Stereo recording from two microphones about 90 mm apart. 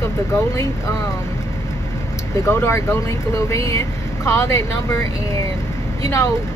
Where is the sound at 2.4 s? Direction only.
30° left (ahead or behind).